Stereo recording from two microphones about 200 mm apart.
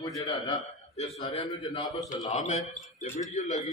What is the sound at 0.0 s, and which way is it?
Speech, 15° left (ahead or behind).